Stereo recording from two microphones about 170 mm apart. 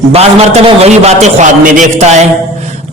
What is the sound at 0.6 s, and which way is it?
A man's voice, 40° right (ahead or behind).